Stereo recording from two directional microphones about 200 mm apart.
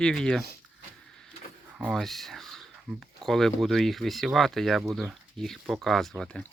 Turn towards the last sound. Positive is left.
turn(degrees=5)  # may be behind; listen again after turning